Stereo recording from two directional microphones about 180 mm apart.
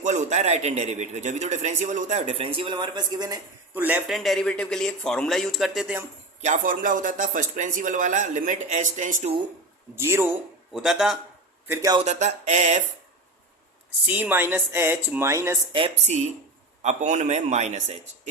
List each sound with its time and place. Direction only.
0.0 s a man's voice: 40° right (ahead or behind); by 3.4 s 20° right (ahead or behind)
3.8 s a man's voice: 10° right (ahead or behind)
6.4 s speech: 45° right (ahead or behind)
9.9 s speech: 15° right (ahead or behind)
10.7 s a man's voice: centre (ahead or behind)
11.7 s speech: 15° right (ahead or behind)
11.9 s a man's voice: 40° right (ahead or behind)
14.1 s speech: 10° right (ahead or behind)
15.7 s a man's voice: 35° right (ahead or behind)